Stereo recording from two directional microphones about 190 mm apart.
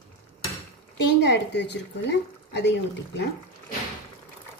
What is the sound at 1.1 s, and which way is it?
Speech, 65° left (ahead or behind).